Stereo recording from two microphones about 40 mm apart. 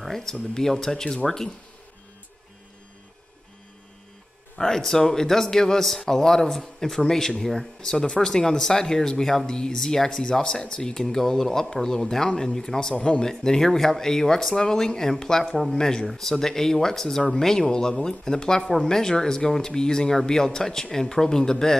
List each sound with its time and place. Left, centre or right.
0.0 s speech: centre
4.6 s speech: centre
9.5 s speech: centre
12.9 s speech: left
13.2 s speech: centre